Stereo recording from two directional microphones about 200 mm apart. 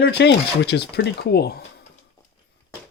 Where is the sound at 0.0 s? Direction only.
60° left (ahead or behind).